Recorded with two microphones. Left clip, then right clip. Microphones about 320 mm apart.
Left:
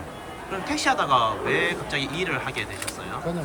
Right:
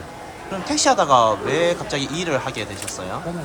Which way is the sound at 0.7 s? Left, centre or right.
Centre.